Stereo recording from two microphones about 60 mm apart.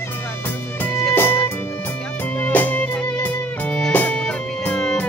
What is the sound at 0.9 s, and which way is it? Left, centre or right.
Music, left.